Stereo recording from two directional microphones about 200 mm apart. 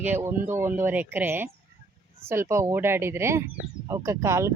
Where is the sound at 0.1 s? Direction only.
10° right (ahead or behind).